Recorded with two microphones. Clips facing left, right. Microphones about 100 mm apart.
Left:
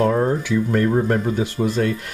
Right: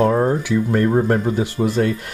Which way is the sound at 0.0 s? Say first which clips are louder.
Right 2 dB; 20° right (ahead or behind).